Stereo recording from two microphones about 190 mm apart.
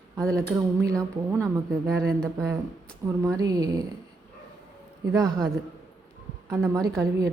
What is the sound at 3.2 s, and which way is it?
Speech, 20° right (ahead or behind).